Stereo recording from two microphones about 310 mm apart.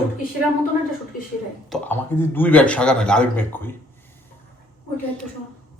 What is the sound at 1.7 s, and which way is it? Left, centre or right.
Speech, centre.